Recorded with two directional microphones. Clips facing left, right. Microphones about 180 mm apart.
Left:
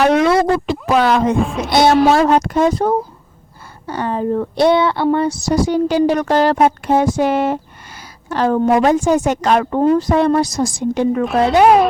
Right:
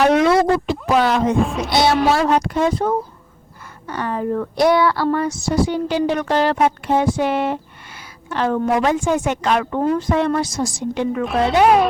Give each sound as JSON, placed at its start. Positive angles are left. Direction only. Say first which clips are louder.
{"t": 0.0, "sound": "a sound", "louder": "left 1 dB", "side_deg": 70}
{"t": 1.5, "sound": "music", "louder": "left 1 dB", "side_deg": 0}
{"t": 1.7, "sound": "speech", "louder": "left 5 dB", "side_deg": 50}